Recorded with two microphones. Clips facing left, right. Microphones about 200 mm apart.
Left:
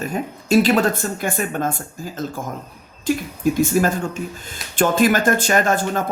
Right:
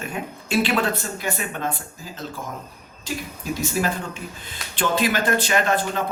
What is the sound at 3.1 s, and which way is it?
Speech, 55° left (ahead or behind).